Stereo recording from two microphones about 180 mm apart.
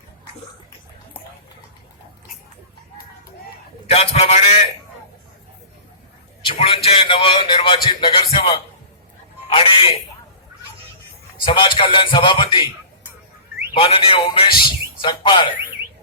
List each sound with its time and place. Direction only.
3.8 s speech: 35° left (ahead or behind)
6.4 s a man's voice: 30° left (ahead or behind)
11.4 s a man's voice: 30° left (ahead or behind)
13.7 s speech: 30° left (ahead or behind)